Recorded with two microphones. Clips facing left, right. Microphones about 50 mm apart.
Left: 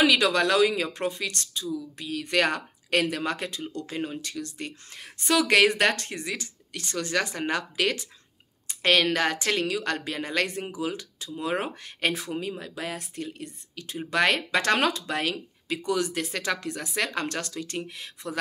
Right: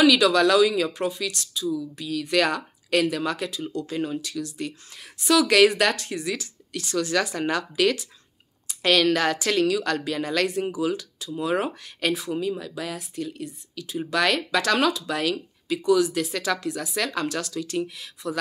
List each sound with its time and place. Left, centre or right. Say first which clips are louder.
0.0 s speech: right 4 dB; left
0.9 s speech: right 2 dB; left
4.2 s speech: right 4 dB; left
5.3 s speech: right 3 dB; left
5.9 s speech: right 4 dB; left
7.3 s speech: right 3 dB; centre
12.1 s speech: right 7 dB; left
12.9 s speech: right 3 dB; left
13.9 s speech: right 1 dB; left
14.6 s speech: right 3 dB; left
15.0 s speech: right 3 dB; left
15.7 s speech: right 6 dB; left